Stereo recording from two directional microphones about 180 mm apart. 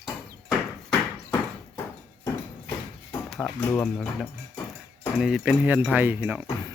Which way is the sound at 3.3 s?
5° left (ahead or behind).